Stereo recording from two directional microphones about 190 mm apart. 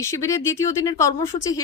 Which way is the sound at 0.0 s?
15° left (ahead or behind).